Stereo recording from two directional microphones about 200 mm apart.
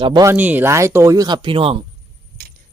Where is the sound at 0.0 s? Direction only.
20° right (ahead or behind).